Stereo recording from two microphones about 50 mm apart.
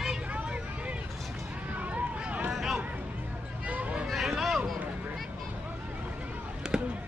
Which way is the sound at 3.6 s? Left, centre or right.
Right.